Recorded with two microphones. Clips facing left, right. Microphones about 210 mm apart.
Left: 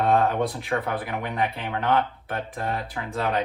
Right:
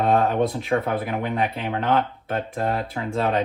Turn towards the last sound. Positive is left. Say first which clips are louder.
# right 3 dB
turn(degrees=-25)  # may be behind; listen again after turning